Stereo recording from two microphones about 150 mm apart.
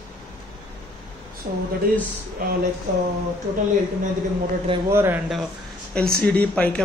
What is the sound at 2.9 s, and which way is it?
Speech, 55° right (ahead or behind).